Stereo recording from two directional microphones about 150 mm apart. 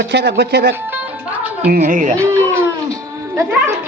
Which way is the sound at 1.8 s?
60° right (ahead or behind).